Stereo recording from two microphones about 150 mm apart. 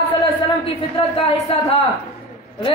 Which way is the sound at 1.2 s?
40° left (ahead or behind).